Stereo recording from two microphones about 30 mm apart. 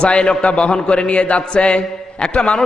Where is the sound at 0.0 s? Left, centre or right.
Left.